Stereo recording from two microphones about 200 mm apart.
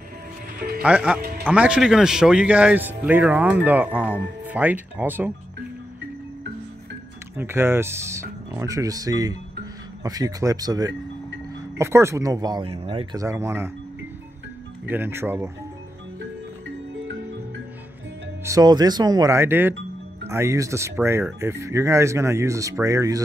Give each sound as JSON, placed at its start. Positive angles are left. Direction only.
{"t": 0.8, "sound": "a man's voice", "side_deg": -5}
{"t": 7.3, "sound": "a man's voice", "side_deg": -10}
{"t": 13.2, "sound": "a man's voice", "side_deg": -15}
{"t": 14.9, "sound": "a man's voice", "side_deg": -10}
{"t": 16.9, "sound": "music", "side_deg": -70}
{"t": 18.4, "sound": "a man's voice", "side_deg": -15}